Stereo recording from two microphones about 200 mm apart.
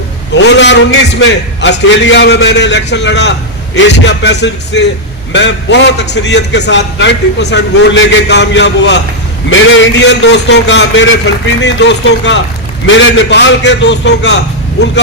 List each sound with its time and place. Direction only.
0.3 s a man's voice: 60° left (ahead or behind)